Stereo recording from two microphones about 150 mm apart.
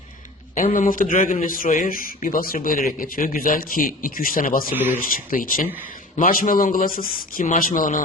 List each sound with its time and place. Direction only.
0.5 s a man's voice: 65° left (ahead or behind)
4.7 s a man's voice: 10° right (ahead or behind)
4.9 s a man's voice: 70° left (ahead or behind)